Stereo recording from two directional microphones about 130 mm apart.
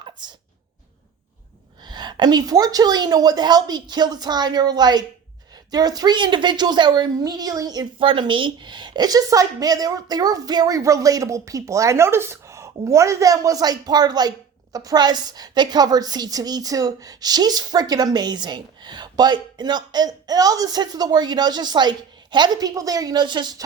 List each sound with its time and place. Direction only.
0.0 s sneeze: 35° right (ahead or behind)
1.8 s a woman's voice: 35° right (ahead or behind)